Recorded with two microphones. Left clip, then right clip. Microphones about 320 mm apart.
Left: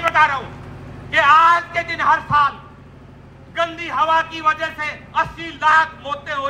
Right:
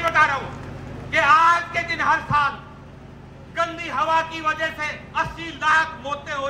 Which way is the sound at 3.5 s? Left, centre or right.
Centre.